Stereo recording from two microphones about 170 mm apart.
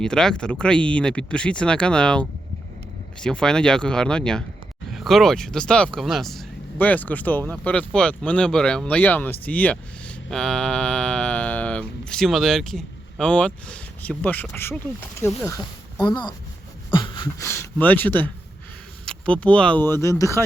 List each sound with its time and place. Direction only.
0.0 s speech: 5° left (ahead or behind)
16.0 s speech: 25° left (ahead or behind)